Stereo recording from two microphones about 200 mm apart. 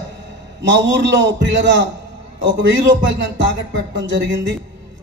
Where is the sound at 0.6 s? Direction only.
65° right (ahead or behind).